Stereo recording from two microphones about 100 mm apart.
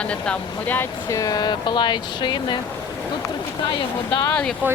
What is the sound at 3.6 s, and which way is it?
Speech, 50° left (ahead or behind).